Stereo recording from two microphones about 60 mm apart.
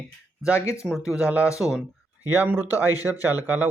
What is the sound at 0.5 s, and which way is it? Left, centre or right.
Speech, left.